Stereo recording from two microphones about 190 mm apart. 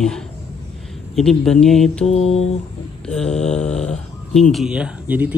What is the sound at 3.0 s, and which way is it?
Speech, 5° left (ahead or behind).